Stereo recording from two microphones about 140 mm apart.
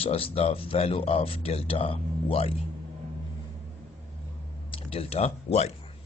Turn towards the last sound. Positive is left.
turn(degrees=50)  # may be behind; listen again after turning